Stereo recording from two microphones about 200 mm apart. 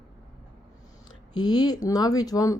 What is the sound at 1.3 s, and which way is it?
Speech, 20° left (ahead or behind).